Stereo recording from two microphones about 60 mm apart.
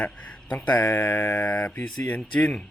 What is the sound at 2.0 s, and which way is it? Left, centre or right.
Speech, left.